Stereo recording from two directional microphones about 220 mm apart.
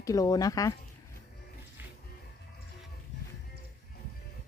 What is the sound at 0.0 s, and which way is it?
Speech, 15° left (ahead or behind).